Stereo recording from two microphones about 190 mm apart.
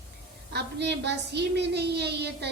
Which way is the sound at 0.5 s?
65° right (ahead or behind).